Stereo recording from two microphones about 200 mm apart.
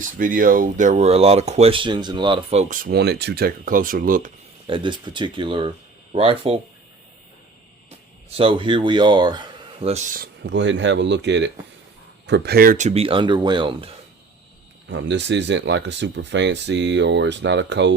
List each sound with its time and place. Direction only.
0.2 s speech: 45° right (ahead or behind)
2.8 s speech: 55° right (ahead or behind)
4.6 s speech: 25° right (ahead or behind)
7.9 s speech: 30° right (ahead or behind)
9.9 s speech: 40° right (ahead or behind)
10.4 s speech: 65° right (ahead or behind); by 13.9 s 25° right (ahead or behind)
14.8 s speech: 65° right (ahead or behind)